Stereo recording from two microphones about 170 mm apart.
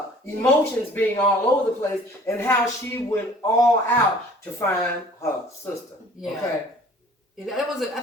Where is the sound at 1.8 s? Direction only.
15° left (ahead or behind).